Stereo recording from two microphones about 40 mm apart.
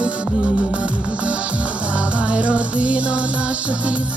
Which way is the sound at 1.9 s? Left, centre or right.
Right.